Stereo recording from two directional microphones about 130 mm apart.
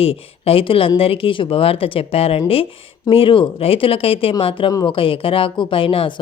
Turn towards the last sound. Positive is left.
turn(degrees=40)  # may be behind; listen again after turning